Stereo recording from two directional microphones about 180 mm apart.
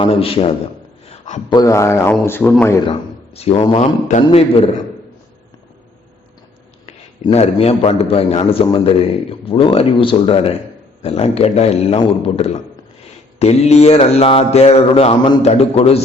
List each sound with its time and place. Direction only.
0.0 s a man's voice: 30° left (ahead or behind)
1.0 s a sound: 40° left (ahead or behind)
1.5 s speech: 20° left (ahead or behind)
2.8 s a man's voice: 30° left (ahead or behind)
6.8 s a man's voice: 35° left (ahead or behind)